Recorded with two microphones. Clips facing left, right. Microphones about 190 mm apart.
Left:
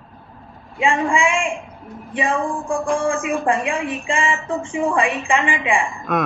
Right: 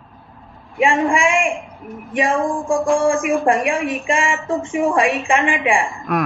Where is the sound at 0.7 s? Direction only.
20° right (ahead or behind).